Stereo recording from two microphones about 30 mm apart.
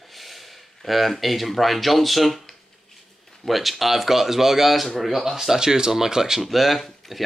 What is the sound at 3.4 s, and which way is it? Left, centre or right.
Speech, centre.